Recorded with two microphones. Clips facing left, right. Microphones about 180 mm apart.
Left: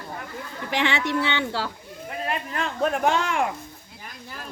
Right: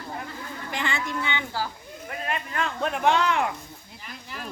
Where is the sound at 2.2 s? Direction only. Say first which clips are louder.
Left 1 dB; 40° left (ahead or behind).